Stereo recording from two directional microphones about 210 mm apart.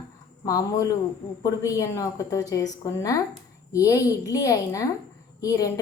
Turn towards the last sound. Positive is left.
turn(degrees=15)  # may be behind; listen again after turning